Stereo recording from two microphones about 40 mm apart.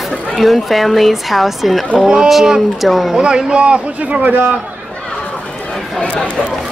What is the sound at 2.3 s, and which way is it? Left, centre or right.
Speech, centre.